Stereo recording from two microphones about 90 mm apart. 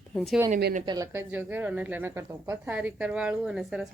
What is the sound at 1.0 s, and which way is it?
Speech, 35° right (ahead or behind).